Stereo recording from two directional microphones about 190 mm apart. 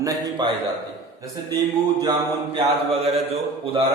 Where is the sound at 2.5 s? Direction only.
30° right (ahead or behind).